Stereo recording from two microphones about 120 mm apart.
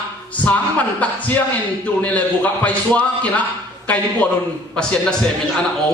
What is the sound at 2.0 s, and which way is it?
A man's voice, 10° left (ahead or behind).